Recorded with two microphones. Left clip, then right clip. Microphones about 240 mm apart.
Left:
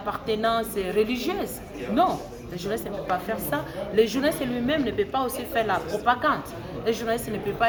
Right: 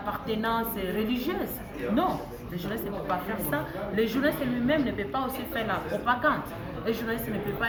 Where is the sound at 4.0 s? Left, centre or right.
Left.